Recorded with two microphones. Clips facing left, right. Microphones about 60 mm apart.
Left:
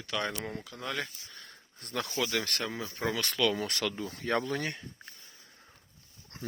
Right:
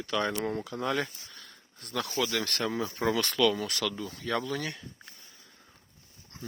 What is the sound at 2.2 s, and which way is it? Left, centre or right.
Speech, centre.